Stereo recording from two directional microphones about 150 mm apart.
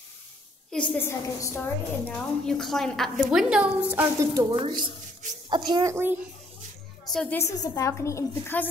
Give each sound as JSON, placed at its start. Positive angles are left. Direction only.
{"t": 0.7, "sound": "a woman's voice", "side_deg": 10}
{"t": 2.0, "sound": "a woman's voice", "side_deg": 5}
{"t": 4.3, "sound": "a child's voice", "side_deg": -25}
{"t": 7.1, "sound": "a woman's voice", "side_deg": 5}
{"t": 7.3, "sound": "a woman's voice", "side_deg": 20}